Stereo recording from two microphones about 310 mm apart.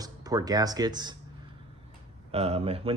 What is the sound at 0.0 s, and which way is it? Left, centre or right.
Speech, centre.